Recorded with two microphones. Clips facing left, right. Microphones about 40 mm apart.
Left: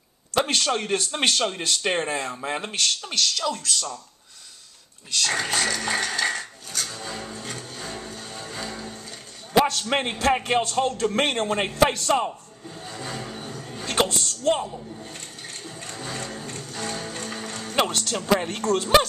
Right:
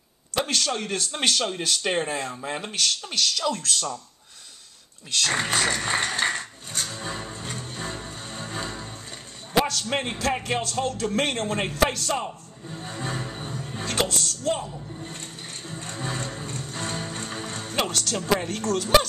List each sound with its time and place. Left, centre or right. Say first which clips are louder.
0.3 s speech: left 3 dB; left; by 3.6 s centre
5.3 s speech: right 1 dB; right
5.7 s a sound: even; right
9.5 s a man's voice: left 3 dB; centre
12.8 s a sound: right 2 dB; right
13.8 s speech: left 3 dB; centre
15.7 s music: right 3 dB; right
17.7 s speech: left 3 dB; centre
18.4 s speech: left 2 dB; left